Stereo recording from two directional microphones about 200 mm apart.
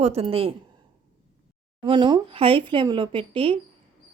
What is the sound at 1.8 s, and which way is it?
A woman's voice, 25° right (ahead or behind).